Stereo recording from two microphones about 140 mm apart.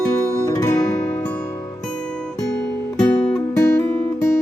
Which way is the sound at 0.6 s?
25° left (ahead or behind).